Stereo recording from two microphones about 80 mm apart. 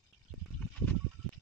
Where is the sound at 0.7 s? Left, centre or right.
Left.